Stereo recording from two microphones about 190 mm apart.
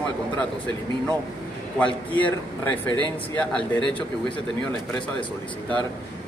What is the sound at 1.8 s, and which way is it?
A man's voice, 10° left (ahead or behind).